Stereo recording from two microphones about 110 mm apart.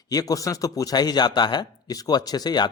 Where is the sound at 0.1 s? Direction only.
35° left (ahead or behind).